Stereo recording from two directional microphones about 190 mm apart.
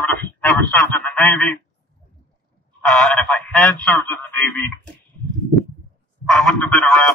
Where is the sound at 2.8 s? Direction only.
5° left (ahead or behind).